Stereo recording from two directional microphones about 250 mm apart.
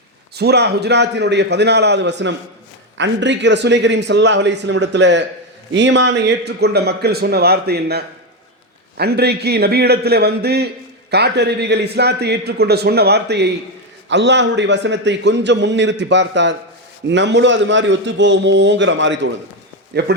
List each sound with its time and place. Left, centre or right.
0.3 s a man's voice: right